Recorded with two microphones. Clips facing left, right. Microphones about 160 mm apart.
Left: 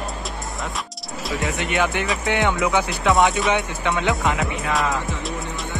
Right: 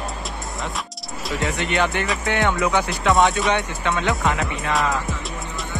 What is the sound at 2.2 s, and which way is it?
Speech, 15° left (ahead or behind).